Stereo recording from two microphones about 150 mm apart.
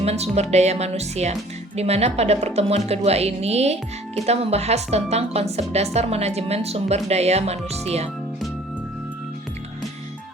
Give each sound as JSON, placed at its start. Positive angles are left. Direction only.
{"t": 0.0, "sound": "a woman's voice", "side_deg": -45}